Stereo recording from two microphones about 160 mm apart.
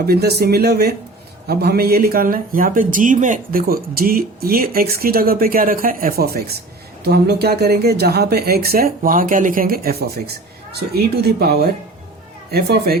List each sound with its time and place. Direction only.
0.0 s speech: 80° right
7.0 s speech: 90° right; by 9.9 s 70° right (ahead or behind)
10.8 s speech: 85° right